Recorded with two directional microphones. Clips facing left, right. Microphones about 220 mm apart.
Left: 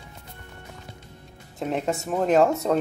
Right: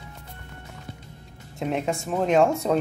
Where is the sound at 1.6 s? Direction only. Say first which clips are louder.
Even; centre (ahead or behind).